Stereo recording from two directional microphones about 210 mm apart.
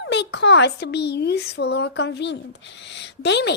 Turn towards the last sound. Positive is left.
turn(degrees=55)  # may be behind; listen again after turning